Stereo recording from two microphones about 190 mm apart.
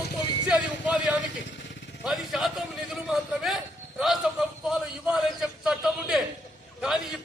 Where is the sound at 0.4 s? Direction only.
5° right (ahead or behind).